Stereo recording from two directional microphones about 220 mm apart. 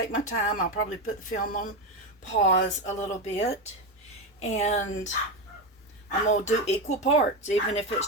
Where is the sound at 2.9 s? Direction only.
30° left (ahead or behind).